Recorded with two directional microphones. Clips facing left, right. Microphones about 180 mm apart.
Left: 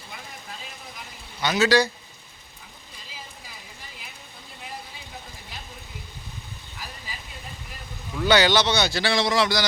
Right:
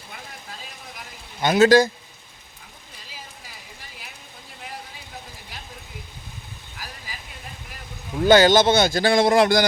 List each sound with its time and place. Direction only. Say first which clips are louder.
1.4 s speech: right 5 dB; 50° right (ahead or behind)
8.2 s speech: right 5 dB; 45° right (ahead or behind)